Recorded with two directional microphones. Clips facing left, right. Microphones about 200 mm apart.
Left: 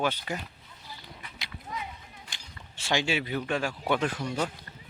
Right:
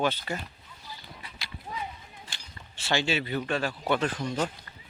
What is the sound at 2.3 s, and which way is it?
Speech, 15° left (ahead or behind).